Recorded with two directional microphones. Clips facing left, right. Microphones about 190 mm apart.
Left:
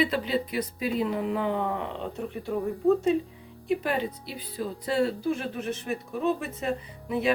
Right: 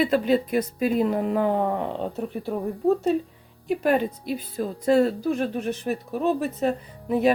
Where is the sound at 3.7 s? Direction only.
50° right (ahead or behind).